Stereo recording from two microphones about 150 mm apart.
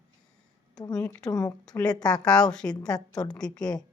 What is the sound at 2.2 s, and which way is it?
Speech, 5° left (ahead or behind).